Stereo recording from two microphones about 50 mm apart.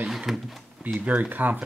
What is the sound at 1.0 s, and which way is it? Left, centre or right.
Speech, right.